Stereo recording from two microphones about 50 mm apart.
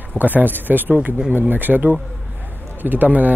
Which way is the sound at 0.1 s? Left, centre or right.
Right.